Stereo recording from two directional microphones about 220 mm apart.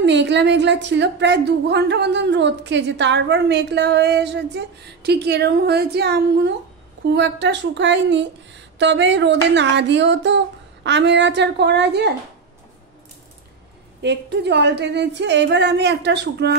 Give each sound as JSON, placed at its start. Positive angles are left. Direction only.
{"t": 0.0, "sound": "a woman's voice", "side_deg": -55}
{"t": 14.0, "sound": "a woman's voice", "side_deg": -50}